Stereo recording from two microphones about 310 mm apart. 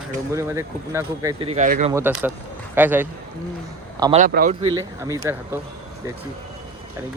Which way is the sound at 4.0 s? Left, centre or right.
Right.